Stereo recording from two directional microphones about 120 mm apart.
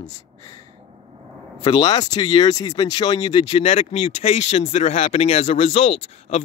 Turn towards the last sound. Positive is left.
turn(degrees=60)  # may be behind; listen again after turning